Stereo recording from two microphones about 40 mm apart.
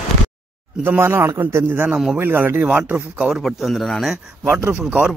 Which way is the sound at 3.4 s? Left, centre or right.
Centre.